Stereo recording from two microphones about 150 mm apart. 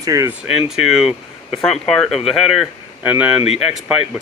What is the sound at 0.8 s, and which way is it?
Speech, centre (ahead or behind).